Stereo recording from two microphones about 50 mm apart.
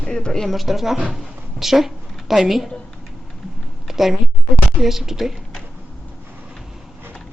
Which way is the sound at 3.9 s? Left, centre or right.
Centre.